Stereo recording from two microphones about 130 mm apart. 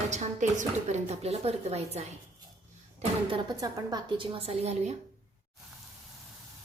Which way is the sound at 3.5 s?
30° right (ahead or behind).